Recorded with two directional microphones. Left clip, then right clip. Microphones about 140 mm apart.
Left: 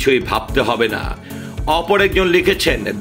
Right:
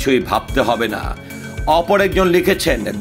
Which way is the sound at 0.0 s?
45° right (ahead or behind).